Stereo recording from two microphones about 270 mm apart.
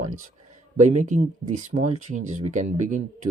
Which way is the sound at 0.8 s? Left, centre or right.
Right.